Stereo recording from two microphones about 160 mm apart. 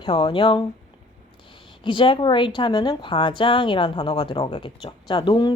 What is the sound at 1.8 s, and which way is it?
A woman's voice, 30° left (ahead or behind).